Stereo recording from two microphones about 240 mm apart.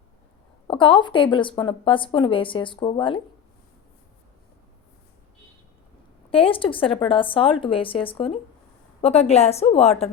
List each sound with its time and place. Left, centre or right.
0.7 s speech: centre
6.3 s speech: left